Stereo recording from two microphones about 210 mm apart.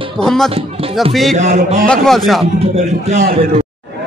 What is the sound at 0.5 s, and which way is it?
A man's voice, 25° right (ahead or behind).